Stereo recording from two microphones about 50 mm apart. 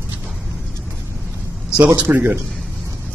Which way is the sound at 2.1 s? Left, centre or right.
Right.